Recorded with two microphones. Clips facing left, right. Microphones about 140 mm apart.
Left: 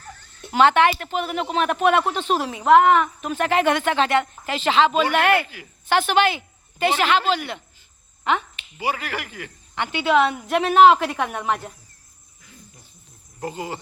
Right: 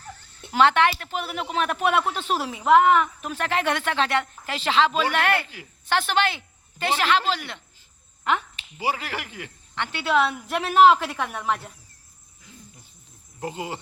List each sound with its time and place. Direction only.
0.5 s speech: centre (ahead or behind)
8.8 s speech: 30° right (ahead or behind)
9.7 s speech: centre (ahead or behind)
13.4 s speech: 20° right (ahead or behind)